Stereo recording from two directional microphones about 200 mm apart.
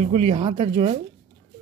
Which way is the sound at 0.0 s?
30° right (ahead or behind).